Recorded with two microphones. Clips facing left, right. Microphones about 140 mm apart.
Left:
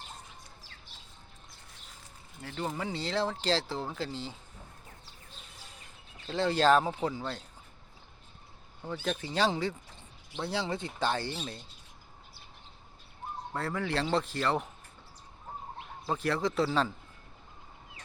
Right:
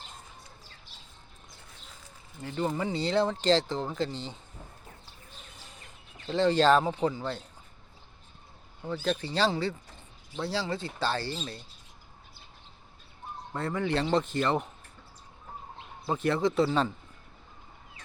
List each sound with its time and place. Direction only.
2.6 s speech: centre (ahead or behind)
6.2 s speech: 10° left (ahead or behind)
8.9 s speech: 10° left (ahead or behind)
13.5 s speech: centre (ahead or behind)
16.0 s speech: centre (ahead or behind)